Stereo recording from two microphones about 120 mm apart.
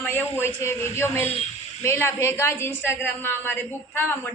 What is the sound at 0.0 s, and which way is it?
A woman's voice, 15° left (ahead or behind).